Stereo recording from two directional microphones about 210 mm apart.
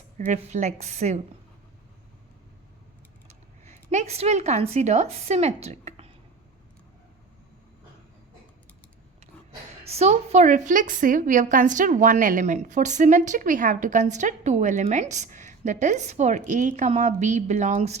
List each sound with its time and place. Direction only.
0.3 s a woman's voice: 35° right (ahead or behind)
3.2 s speech: 35° right (ahead or behind)
9.2 s a woman's voice: 30° right (ahead or behind)